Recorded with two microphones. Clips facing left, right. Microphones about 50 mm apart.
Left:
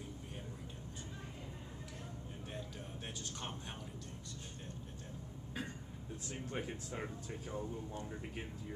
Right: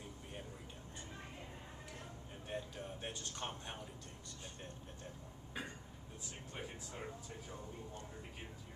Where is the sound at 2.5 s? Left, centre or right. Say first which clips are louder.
Right 5 dB; centre.